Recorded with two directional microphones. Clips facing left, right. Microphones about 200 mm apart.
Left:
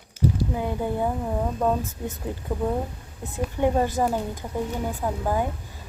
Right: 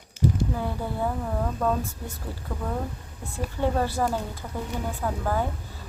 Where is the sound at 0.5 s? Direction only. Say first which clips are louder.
Left 3 dB; 20° left (ahead or behind).